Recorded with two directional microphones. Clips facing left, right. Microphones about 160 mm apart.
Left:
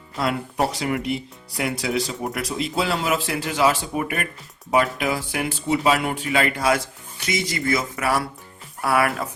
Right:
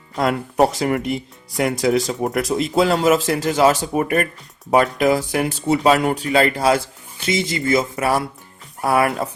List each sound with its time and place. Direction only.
0.2 s speech: 45° right (ahead or behind); by 9.3 s 25° right (ahead or behind)